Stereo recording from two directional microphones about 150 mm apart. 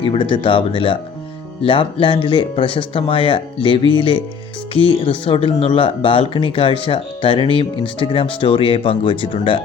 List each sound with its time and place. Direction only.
0.0 s speech: 35° left (ahead or behind)